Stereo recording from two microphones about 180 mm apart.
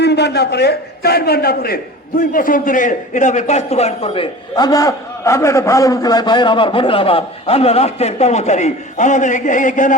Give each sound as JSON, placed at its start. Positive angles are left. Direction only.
{"t": 0.0, "sound": "a man's voice", "side_deg": 70}